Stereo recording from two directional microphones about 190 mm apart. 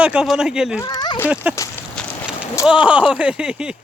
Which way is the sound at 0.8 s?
20° left (ahead or behind).